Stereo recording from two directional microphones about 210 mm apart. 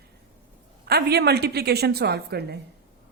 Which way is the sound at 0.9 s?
50° right (ahead or behind).